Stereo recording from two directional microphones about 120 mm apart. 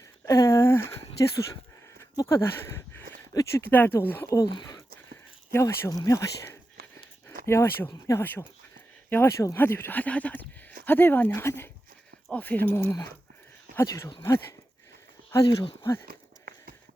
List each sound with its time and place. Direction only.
0.3 s a sound: 25° left (ahead or behind)
2.2 s speech: 20° left (ahead or behind)
4.5 s speech: 35° left (ahead or behind)
5.5 s speech: 25° left (ahead or behind)
8.2 s speech: 15° left (ahead or behind)